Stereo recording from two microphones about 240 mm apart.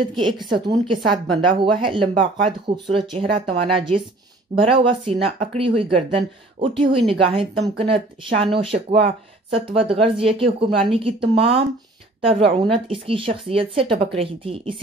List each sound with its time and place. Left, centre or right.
0.1 s speech: centre